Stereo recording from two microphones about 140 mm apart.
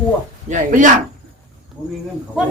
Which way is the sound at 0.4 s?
65° right (ahead or behind).